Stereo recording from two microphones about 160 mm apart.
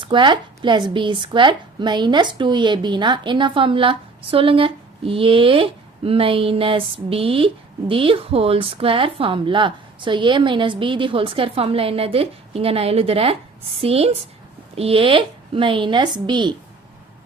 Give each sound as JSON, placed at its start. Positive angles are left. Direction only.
{"t": 0.0, "sound": "speech", "side_deg": -30}